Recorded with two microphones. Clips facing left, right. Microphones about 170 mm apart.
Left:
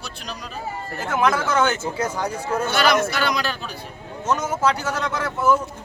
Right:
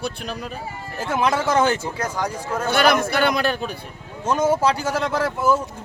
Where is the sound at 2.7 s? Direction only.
55° right (ahead or behind).